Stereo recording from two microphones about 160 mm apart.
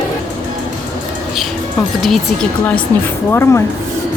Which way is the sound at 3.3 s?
15° left (ahead or behind).